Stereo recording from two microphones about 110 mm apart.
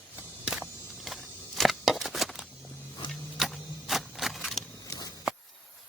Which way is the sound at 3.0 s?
45° left (ahead or behind).